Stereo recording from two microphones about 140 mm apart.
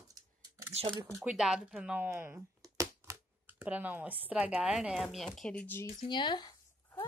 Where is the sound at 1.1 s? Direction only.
10° right (ahead or behind).